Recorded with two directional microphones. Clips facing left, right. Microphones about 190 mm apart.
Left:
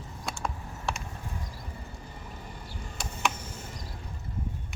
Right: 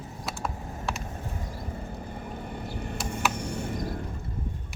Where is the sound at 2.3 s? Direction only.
60° right (ahead or behind).